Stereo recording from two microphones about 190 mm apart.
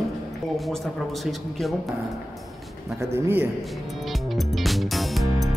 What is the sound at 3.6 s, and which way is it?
Music, centre (ahead or behind).